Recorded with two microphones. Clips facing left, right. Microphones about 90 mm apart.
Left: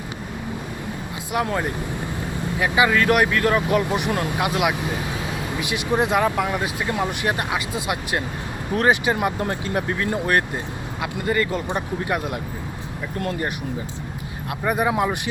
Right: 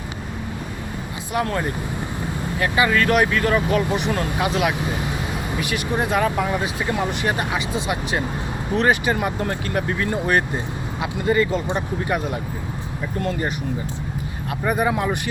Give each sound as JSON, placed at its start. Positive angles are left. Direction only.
{"t": 1.3, "sound": "speech", "side_deg": 5}
{"t": 3.7, "sound": "speech", "side_deg": 10}
{"t": 6.1, "sound": "speech", "side_deg": 5}
{"t": 9.7, "sound": "speech", "side_deg": 0}
{"t": 14.6, "sound": "speech", "side_deg": 5}